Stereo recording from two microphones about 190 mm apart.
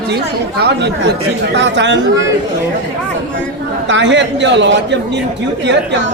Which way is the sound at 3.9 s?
70° right (ahead or behind).